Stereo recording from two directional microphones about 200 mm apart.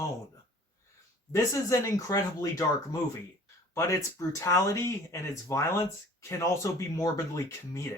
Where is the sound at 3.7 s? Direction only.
15° left (ahead or behind).